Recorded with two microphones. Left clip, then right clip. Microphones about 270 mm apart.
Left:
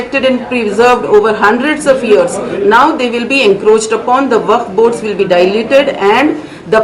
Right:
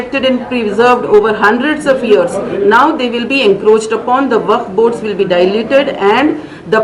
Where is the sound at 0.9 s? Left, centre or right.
Centre.